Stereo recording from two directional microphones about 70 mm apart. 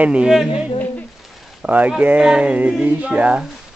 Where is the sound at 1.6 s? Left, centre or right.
Right.